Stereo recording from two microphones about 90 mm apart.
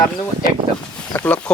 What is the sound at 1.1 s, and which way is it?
Speech, 20° left (ahead or behind).